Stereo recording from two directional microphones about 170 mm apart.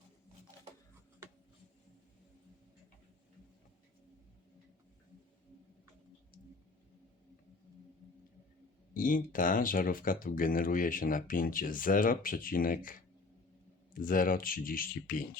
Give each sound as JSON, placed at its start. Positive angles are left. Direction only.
{"t": 8.9, "sound": "speech", "side_deg": 55}